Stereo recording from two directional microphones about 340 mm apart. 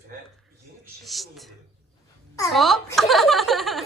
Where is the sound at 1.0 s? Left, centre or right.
Centre.